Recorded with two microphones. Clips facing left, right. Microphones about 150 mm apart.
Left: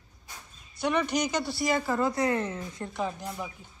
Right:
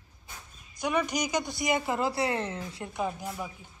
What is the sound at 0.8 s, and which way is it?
A man's voice, 10° right (ahead or behind).